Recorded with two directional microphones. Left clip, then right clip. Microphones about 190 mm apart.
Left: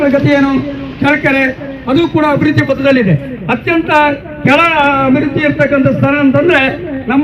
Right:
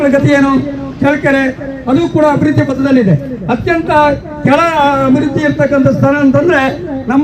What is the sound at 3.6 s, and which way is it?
Speech, 30° right (ahead or behind).